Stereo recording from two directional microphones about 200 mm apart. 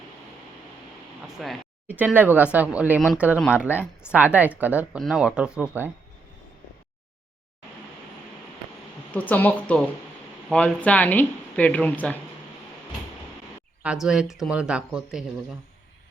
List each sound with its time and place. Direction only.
1.4 s speech: 5° right (ahead or behind)
9.1 s speech: 10° left (ahead or behind)
13.8 s speech: 5° right (ahead or behind)